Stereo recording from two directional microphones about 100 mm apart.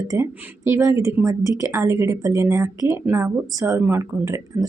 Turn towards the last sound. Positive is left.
turn(degrees=-25)  # may be behind; listen again after turning